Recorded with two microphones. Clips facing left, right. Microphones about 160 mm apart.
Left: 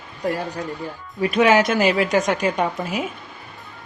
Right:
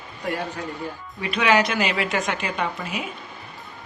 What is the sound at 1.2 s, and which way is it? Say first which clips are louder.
A woman's voice: left 4 dB; 45° left (ahead or behind).